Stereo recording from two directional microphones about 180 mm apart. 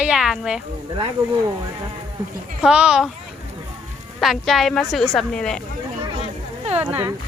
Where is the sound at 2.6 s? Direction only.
5° right (ahead or behind).